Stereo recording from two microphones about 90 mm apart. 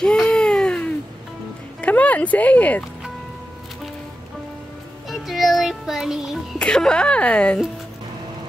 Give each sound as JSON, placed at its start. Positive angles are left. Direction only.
{"t": 0.0, "sound": "baby cry", "side_deg": 10}
{"t": 1.8, "sound": "speech", "side_deg": 15}
{"t": 5.1, "sound": "music", "side_deg": 0}
{"t": 6.6, "sound": "speech", "side_deg": 10}